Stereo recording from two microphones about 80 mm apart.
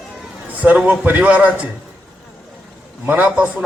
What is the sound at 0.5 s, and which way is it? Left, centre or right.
A man's voice, centre.